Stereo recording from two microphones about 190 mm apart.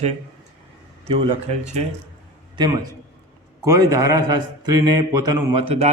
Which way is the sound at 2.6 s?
20° right (ahead or behind).